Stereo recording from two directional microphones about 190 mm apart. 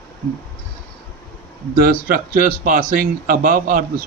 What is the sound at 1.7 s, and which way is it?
Speech, 50° right (ahead or behind).